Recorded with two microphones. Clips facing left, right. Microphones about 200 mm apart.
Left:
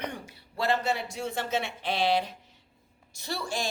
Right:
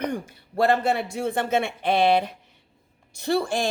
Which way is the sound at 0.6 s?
55° right (ahead or behind).